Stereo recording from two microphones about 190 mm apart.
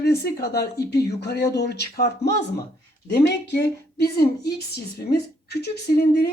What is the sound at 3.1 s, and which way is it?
Speech, 60° left (ahead or behind).